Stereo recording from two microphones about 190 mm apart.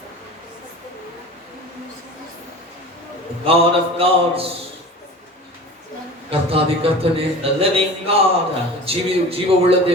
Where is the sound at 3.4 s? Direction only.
30° right (ahead or behind).